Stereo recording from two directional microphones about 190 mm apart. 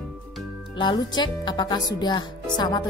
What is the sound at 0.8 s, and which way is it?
Speech, 25° left (ahead or behind).